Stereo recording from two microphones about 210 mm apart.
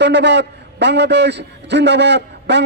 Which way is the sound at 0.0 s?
55° right (ahead or behind).